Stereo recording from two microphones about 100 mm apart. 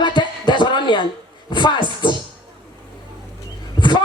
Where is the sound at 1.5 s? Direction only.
50° left (ahead or behind).